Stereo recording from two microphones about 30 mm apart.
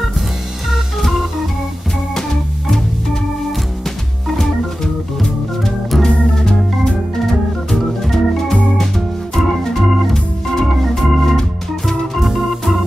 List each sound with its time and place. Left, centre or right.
5.6 s organ: centre
6.0 s organ: left